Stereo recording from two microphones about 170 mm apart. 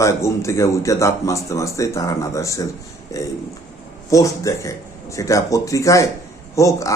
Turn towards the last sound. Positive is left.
turn(degrees=20)  # may be behind; listen again after turning